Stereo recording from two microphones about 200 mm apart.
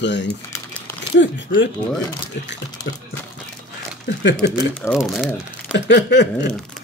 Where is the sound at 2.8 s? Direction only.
20° left (ahead or behind).